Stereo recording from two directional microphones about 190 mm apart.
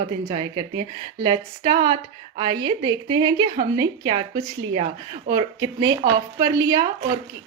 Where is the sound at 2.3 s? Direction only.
20° right (ahead or behind).